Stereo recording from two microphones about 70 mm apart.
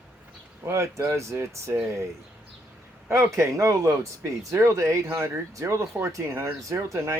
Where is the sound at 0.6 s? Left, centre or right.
Right.